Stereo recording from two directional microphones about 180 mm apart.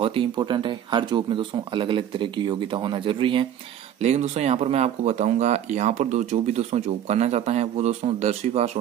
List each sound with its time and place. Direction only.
0.0 s speech: 30° right (ahead or behind)